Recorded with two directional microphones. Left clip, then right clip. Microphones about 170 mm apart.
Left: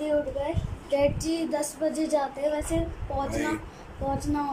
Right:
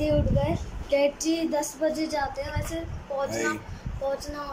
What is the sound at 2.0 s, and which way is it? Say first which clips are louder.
Child singing: left 2 dB; 15° left (ahead or behind).